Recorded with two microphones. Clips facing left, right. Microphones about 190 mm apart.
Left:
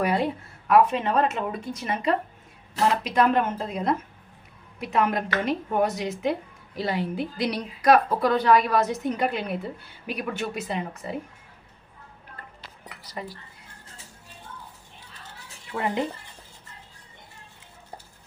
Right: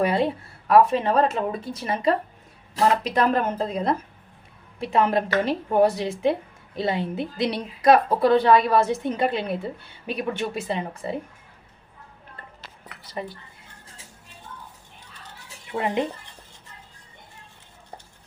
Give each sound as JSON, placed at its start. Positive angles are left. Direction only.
{"t": 0.0, "sound": "a woman's voice", "side_deg": -30}
{"t": 13.0, "sound": "speech", "side_deg": -25}
{"t": 15.7, "sound": "a woman's voice", "side_deg": -20}